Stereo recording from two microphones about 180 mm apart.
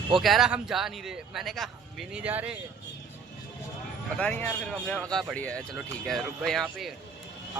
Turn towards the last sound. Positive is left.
turn(degrees=0)  # may be behind; listen again after turning